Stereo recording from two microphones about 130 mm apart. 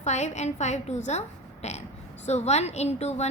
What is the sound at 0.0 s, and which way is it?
A woman's voice, 60° left (ahead or behind).